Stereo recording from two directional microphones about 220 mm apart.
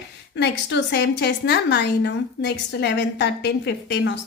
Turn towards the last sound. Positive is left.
turn(degrees=50)  # may be behind; listen again after turning